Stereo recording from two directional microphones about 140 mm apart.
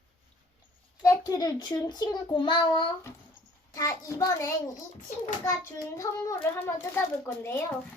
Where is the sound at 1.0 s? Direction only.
25° left (ahead or behind).